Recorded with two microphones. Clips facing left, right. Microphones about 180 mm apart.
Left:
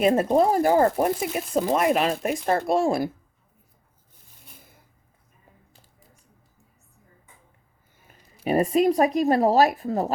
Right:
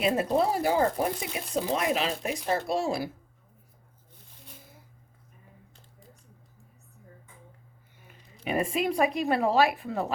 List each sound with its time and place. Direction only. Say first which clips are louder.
0.0 s speech: left 6 dB; 50° left (ahead or behind)
8.4 s speech: left 8 dB; 40° left (ahead or behind)